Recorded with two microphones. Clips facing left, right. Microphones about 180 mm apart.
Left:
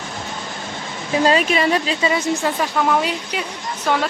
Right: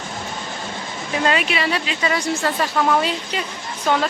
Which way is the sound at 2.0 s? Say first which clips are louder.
Left 2 dB; 20° left (ahead or behind).